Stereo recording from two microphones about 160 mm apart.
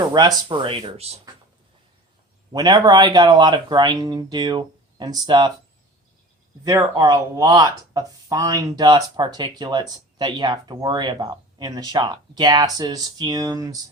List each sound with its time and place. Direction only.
0.1 s speech: 25° right (ahead or behind)
2.5 s speech: 25° right (ahead or behind)
6.7 s speech: 20° right (ahead or behind)